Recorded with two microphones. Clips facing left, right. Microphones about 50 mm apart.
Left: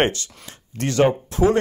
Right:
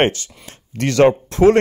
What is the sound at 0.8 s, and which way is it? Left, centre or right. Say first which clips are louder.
Speech: right 5 dB; right.